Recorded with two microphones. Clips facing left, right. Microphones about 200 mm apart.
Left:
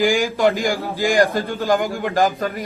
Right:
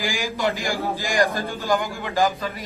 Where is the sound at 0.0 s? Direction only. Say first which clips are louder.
Left 8 dB; 55° left (ahead or behind).